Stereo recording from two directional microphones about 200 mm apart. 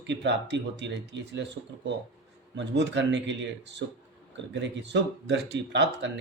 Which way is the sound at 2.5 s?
60° right (ahead or behind).